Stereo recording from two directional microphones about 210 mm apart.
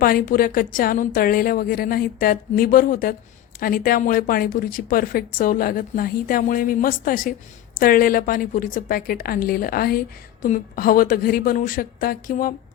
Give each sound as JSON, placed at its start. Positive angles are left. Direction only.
{"t": 0.0, "sound": "speech", "side_deg": 45}